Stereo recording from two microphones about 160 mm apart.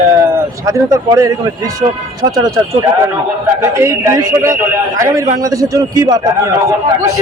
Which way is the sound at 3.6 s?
15° right (ahead or behind).